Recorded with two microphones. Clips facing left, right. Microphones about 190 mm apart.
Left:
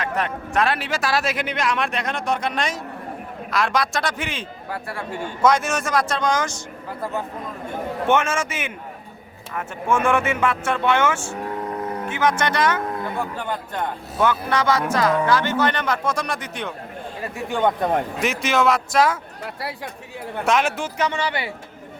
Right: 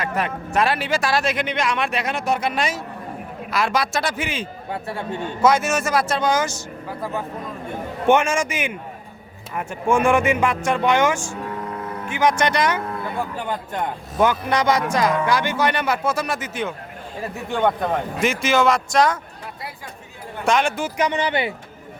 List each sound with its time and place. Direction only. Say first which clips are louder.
0.0 s speech: right 1 dB; 5° right (ahead or behind)
4.7 s speech: right 2 dB; 25° right (ahead or behind)
5.4 s speech: right 1 dB; 5° right (ahead or behind)
8.1 s a woman's voice: right 3 dB; 15° right (ahead or behind)
18.2 s speech: right 5 dB; centre (ahead or behind)
20.4 s speech: right 1 dB; centre (ahead or behind)
21.0 s speech: right 3 dB; 20° right (ahead or behind)